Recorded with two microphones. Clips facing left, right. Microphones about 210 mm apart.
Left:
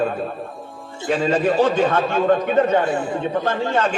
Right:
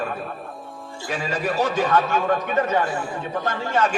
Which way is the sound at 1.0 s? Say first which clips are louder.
Left 8 dB; 25° left (ahead or behind).